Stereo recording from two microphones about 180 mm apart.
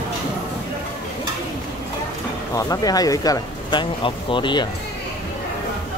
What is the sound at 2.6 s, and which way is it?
Speech, 20° left (ahead or behind).